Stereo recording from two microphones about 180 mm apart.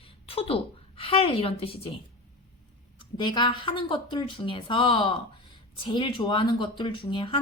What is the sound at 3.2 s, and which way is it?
A woman's voice, 25° left (ahead or behind).